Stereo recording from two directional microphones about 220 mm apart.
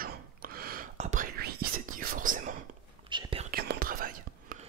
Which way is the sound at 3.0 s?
20° right (ahead or behind).